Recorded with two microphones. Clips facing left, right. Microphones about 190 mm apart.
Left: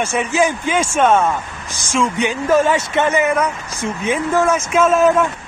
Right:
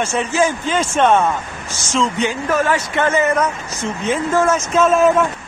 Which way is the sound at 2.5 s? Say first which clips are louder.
Left 6 dB; 25° left (ahead or behind).